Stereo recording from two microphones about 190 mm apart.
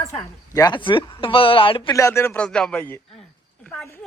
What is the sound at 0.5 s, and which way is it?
Speech, 25° left (ahead or behind).